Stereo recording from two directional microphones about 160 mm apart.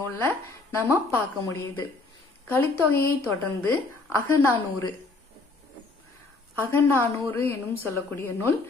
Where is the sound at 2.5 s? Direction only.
15° left (ahead or behind).